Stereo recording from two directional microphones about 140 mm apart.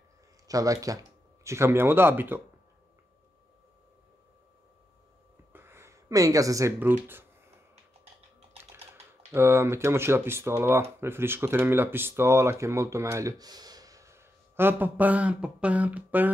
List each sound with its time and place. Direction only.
0.5 s speech: 25° right (ahead or behind)
5.5 s a sound: 15° right (ahead or behind)
9.3 s speech: 20° right (ahead or behind)